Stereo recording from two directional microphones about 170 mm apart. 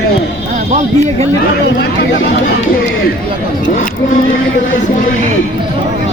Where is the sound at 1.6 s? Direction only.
80° left.